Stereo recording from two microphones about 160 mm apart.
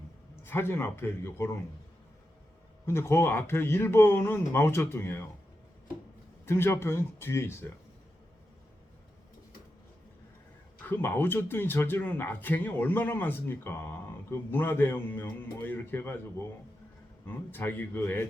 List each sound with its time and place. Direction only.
0.4 s speech: 15° left (ahead or behind)
2.8 s speech: 15° left (ahead or behind)
6.4 s speech: 15° left (ahead or behind)
10.8 s speech: 10° left (ahead or behind)
17.2 s speech: 10° left (ahead or behind)